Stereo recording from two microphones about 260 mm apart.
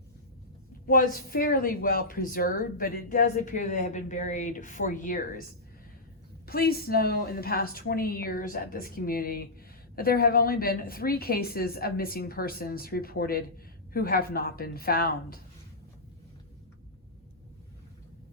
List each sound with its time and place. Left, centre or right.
0.9 s speech: left